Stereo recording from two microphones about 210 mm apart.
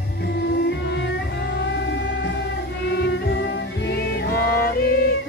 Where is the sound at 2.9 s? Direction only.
55° left (ahead or behind).